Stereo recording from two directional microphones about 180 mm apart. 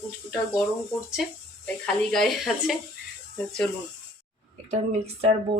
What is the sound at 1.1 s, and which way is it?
Speech, centre (ahead or behind).